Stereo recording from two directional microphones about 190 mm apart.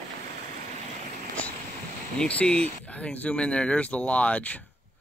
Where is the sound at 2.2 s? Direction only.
5° left (ahead or behind).